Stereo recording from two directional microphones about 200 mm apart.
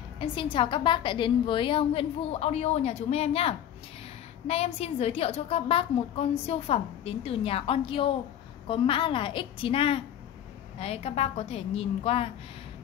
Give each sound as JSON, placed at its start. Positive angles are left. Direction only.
{"t": 0.2, "sound": "a woman's voice", "side_deg": 25}